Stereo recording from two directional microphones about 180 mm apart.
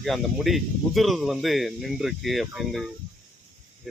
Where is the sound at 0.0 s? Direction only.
Centre (ahead or behind).